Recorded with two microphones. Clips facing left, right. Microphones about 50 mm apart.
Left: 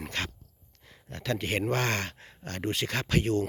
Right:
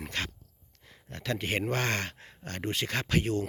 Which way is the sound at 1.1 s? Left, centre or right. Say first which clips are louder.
Left 1 dB; centre.